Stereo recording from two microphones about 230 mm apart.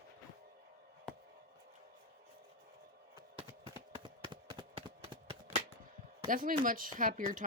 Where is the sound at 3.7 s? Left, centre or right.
Centre.